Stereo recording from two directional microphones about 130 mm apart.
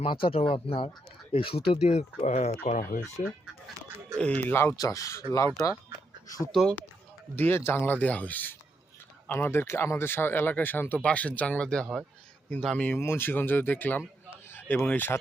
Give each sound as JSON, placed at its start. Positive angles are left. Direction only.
{"t": 0.0, "sound": "speech", "side_deg": 45}
{"t": 2.6, "sound": "speech", "side_deg": 70}
{"t": 4.4, "sound": "speech", "side_deg": 15}
{"t": 6.2, "sound": "speech", "side_deg": 25}
{"t": 6.5, "sound": "speech", "side_deg": 5}
{"t": 7.3, "sound": "speech", "side_deg": 15}